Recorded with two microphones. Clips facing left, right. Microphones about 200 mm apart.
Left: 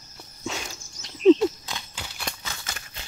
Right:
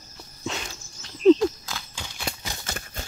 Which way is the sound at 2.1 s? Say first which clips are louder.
Right 3 dB; 10° right (ahead or behind).